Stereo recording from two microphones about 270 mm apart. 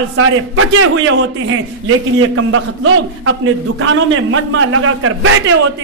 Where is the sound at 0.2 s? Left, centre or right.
Right.